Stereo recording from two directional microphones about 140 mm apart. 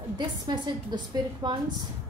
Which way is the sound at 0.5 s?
30° right (ahead or behind).